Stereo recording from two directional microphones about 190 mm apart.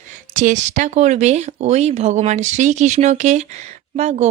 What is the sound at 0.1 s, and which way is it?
Speech, 40° right (ahead or behind).